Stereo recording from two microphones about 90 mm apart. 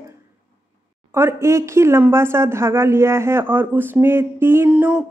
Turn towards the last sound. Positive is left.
turn(degrees=-10)  # may be behind; listen again after turning